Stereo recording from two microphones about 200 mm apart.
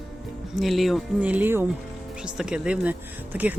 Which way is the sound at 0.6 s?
Centre (ahead or behind).